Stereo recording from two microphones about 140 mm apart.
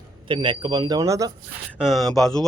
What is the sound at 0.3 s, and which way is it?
Speech, 35° right (ahead or behind).